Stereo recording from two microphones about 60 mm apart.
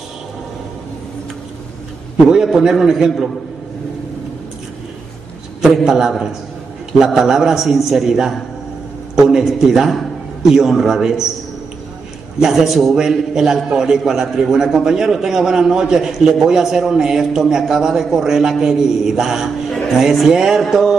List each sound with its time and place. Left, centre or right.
2.2 s a man's voice: centre
5.9 s a man's voice: centre
12.4 s a man's voice: centre